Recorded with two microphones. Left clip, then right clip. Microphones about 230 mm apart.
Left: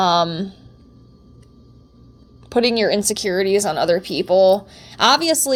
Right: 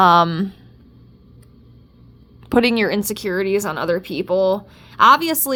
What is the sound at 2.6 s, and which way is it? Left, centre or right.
Speech, right.